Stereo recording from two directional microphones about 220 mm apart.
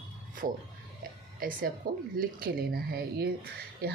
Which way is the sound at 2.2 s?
45° right (ahead or behind).